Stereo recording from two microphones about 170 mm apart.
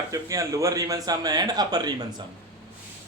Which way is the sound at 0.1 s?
20° right (ahead or behind).